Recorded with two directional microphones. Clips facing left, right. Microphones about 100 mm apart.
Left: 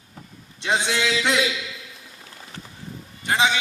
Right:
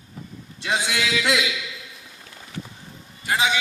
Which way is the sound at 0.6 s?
30° left (ahead or behind).